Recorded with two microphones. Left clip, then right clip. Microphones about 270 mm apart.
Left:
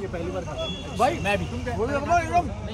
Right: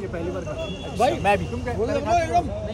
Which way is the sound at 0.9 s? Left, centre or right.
Centre.